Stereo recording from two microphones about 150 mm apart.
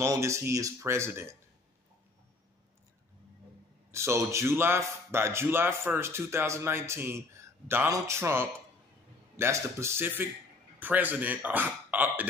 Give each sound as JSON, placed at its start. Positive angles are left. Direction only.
{"t": 0.0, "sound": "speech", "side_deg": -20}
{"t": 3.9, "sound": "a man's voice", "side_deg": -20}